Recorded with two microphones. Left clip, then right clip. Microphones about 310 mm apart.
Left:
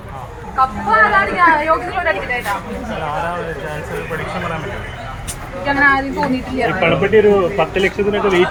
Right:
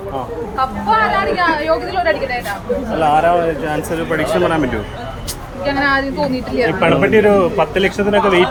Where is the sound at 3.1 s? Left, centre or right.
Right.